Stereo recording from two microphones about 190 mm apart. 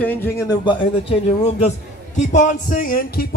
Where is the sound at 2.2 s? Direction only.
40° left (ahead or behind).